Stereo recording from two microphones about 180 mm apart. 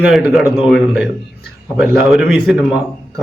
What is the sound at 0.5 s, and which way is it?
A man's voice, centre (ahead or behind).